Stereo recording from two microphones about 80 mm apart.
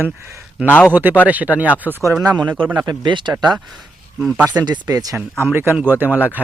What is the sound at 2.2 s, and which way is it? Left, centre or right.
Speech, right.